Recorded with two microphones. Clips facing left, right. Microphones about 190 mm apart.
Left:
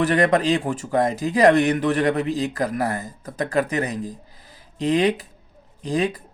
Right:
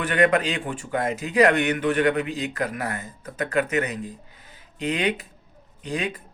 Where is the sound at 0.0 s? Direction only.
35° left (ahead or behind).